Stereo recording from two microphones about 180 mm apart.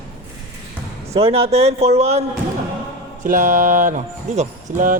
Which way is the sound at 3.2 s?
45° right (ahead or behind).